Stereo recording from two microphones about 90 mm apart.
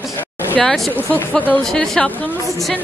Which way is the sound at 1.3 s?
20° left (ahead or behind).